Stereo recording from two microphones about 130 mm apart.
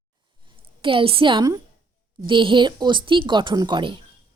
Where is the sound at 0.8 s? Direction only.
40° right (ahead or behind).